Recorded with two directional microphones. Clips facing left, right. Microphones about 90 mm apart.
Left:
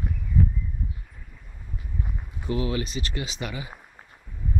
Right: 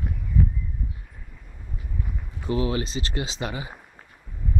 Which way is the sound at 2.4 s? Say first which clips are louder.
Right 2 dB; 30° right (ahead or behind).